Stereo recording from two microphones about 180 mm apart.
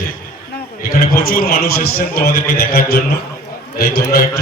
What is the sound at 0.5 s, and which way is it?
A man's voice, 55° left (ahead or behind).